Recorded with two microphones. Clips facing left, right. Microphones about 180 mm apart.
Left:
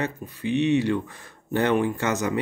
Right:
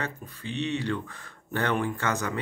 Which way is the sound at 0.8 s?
15° left (ahead or behind).